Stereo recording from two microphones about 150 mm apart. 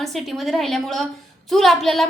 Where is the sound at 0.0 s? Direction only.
Centre (ahead or behind).